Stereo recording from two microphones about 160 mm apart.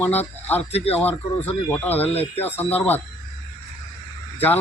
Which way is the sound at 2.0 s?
40° left (ahead or behind).